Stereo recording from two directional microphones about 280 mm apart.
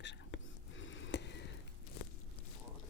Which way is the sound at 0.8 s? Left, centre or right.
Left.